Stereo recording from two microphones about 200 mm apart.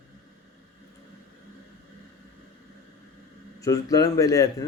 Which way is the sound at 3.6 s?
15° left (ahead or behind).